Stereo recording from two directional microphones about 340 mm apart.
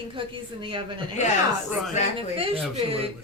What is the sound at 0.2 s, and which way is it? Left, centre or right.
Speech, centre.